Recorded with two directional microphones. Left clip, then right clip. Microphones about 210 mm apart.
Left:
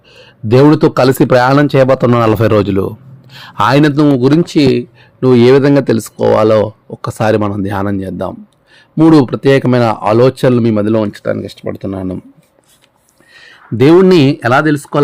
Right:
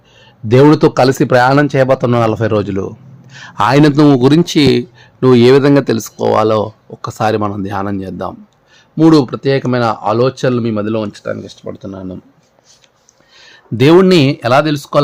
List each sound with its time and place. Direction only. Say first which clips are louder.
0.1 s a man's voice: left 1 dB; 10° left (ahead or behind); by 12.2 s 30° left (ahead or behind)
13.3 s a sound: left 3 dB; 15° left (ahead or behind)
13.7 s a man's voice: left 1 dB; centre (ahead or behind)
14.1 s speech: left 1 dB; 10° left (ahead or behind)